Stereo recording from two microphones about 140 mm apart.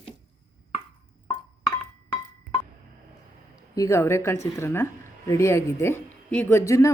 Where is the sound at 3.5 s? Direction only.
25° left (ahead or behind).